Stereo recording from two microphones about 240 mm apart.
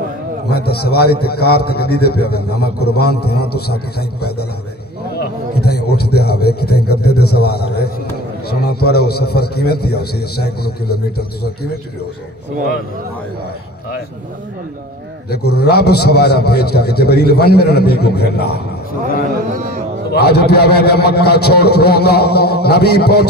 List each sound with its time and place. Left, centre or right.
0.5 s a man's voice: left
5.2 s a sound: left
6.1 s a man's voice: left
15.2 s a man's voice: left
20.1 s a man's voice: left